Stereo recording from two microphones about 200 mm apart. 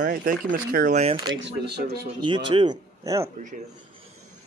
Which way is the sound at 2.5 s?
25° right (ahead or behind).